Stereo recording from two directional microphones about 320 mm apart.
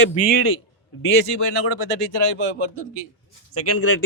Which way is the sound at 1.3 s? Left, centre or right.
Left.